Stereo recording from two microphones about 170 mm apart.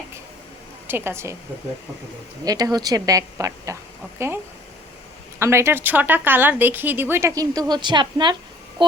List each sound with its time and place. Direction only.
0.9 s a woman's voice: 15° right (ahead or behind)
2.4 s a woman's voice: 20° right (ahead or behind)
5.4 s a woman's voice: 15° right (ahead or behind)